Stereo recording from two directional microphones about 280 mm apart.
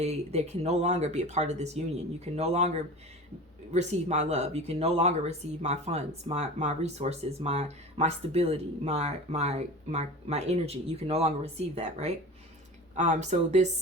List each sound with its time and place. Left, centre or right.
0.0 s speech: right